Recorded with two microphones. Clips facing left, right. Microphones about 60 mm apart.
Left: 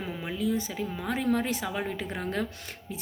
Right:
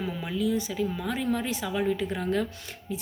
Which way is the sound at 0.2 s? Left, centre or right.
Left.